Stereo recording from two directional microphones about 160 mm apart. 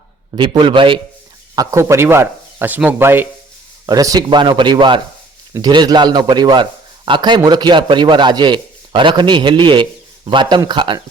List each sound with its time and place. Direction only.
0.3 s a man's voice: 30° right (ahead or behind)
1.5 s a man's voice: 20° right (ahead or behind)